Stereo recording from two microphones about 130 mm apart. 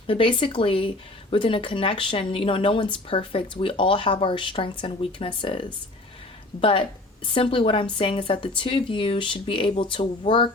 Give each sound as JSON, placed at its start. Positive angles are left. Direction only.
{"t": 0.1, "sound": "speech", "side_deg": 40}